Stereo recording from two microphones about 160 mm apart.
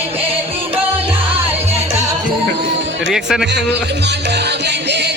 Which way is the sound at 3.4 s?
90° right.